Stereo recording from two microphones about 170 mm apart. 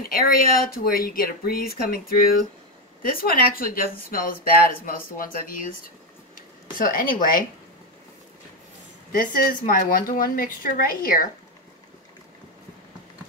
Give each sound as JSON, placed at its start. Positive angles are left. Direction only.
{"t": 0.0, "sound": "speech", "side_deg": 60}
{"t": 9.1, "sound": "speech", "side_deg": 55}